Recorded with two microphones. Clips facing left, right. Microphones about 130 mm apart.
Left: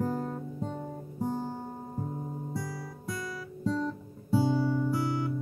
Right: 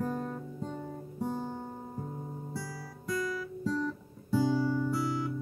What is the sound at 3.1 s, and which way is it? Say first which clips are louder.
Guitar: right 5 dB; 25° left (ahead or behind).